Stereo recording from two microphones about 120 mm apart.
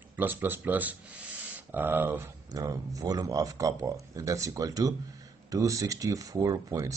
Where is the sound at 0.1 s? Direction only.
15° right (ahead or behind).